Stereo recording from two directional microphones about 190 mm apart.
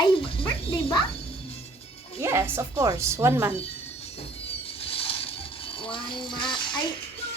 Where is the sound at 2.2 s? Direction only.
10° right (ahead or behind).